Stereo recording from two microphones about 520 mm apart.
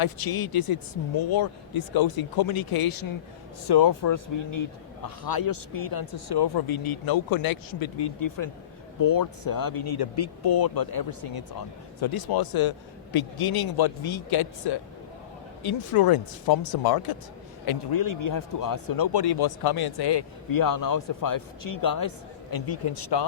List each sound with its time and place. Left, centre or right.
0.2 s speech: left
15.9 s speech: left